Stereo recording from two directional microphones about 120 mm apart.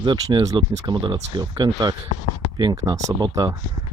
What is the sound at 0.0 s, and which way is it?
Speech, 35° right (ahead or behind).